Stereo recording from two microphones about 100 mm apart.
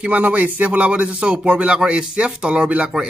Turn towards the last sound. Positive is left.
turn(degrees=-10)  # may be behind; listen again after turning